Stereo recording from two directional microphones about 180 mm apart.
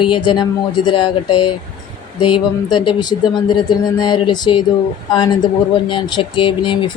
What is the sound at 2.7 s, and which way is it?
Music, 25° left (ahead or behind).